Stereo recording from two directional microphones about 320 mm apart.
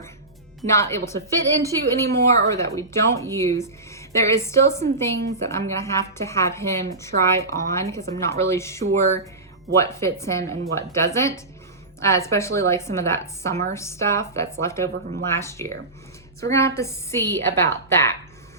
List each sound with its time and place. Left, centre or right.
0.7 s speech: centre
9.0 s speech: right
9.7 s speech: centre